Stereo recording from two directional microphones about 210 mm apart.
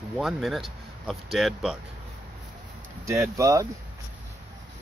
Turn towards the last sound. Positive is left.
turn(degrees=-15)  # may be behind; listen again after turning